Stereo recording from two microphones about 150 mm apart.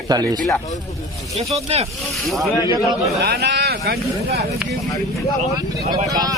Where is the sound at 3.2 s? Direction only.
90° right.